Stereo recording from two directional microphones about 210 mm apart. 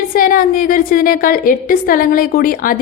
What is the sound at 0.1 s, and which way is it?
A woman's voice, 40° left (ahead or behind).